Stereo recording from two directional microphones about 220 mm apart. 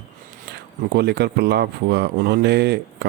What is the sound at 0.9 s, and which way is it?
A man's voice, 50° right (ahead or behind).